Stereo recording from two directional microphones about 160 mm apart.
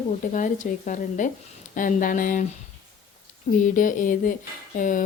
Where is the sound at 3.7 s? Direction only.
55° left (ahead or behind).